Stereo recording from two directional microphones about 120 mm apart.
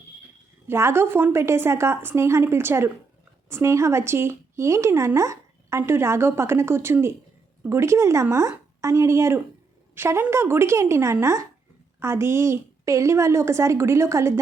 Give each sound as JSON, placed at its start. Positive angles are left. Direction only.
{"t": 0.7, "sound": "speech", "side_deg": -20}